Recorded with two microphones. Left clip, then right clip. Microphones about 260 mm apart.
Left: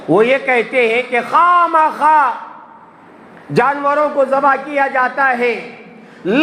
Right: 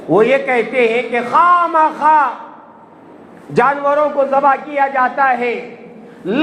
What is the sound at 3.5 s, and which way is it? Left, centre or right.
A man's voice, left.